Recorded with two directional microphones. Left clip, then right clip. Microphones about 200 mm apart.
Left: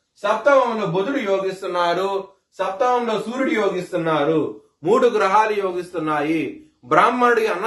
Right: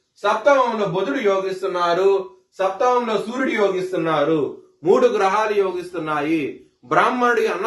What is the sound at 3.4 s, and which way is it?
A man's voice, 15° left (ahead or behind).